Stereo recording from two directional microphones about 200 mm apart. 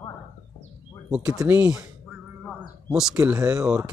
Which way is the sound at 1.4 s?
10° right (ahead or behind).